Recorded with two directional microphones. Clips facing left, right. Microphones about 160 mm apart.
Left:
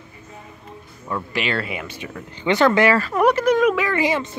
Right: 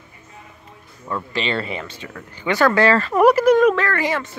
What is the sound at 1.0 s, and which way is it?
Speech, 10° left (ahead or behind).